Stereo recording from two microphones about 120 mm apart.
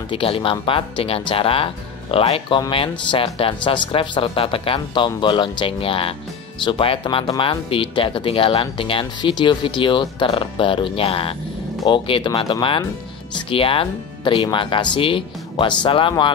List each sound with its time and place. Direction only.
0.1 s speech: 50° left (ahead or behind)